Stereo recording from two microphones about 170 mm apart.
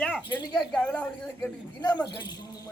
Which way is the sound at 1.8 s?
25° left (ahead or behind).